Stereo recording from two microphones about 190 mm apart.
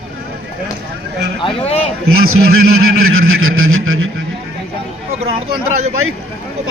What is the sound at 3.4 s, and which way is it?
Vehicle, 90° right.